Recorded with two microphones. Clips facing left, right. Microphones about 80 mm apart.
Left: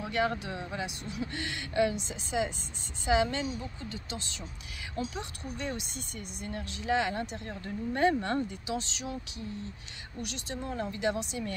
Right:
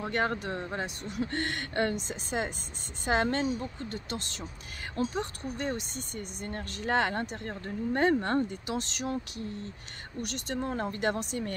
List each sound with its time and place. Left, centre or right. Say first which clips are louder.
0.0 s speech: even; right
10.2 s speech: right 4 dB; right